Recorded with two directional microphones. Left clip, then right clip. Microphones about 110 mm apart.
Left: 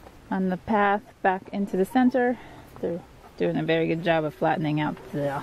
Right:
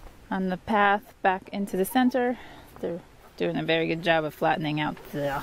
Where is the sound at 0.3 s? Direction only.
30° right (ahead or behind).